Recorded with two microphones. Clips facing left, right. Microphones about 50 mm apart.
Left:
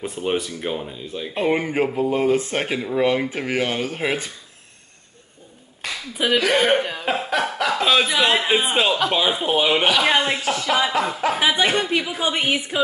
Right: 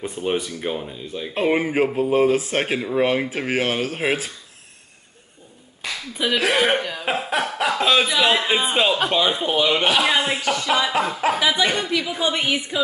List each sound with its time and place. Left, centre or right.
0.0 s speech: centre
5.9 s a sound: centre
6.5 s speech: centre
6.8 s speech: centre
9.6 s speech: centre
11.3 s speech: left